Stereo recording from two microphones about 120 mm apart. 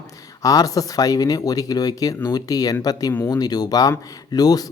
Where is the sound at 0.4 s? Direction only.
30° left (ahead or behind).